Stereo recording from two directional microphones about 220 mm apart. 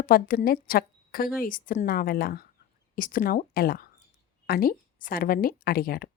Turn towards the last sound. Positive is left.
turn(degrees=40)  # may be behind; listen again after turning